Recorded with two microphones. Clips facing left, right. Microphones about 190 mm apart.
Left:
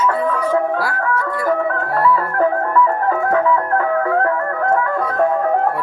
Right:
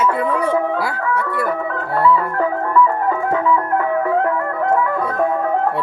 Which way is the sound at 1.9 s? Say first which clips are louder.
Right 2 dB; 25° right (ahead or behind).